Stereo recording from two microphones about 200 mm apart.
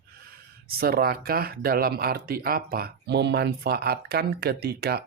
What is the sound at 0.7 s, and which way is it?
Speech, 50° right (ahead or behind).